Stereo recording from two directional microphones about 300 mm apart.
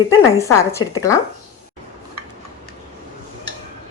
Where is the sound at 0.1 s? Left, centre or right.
Centre.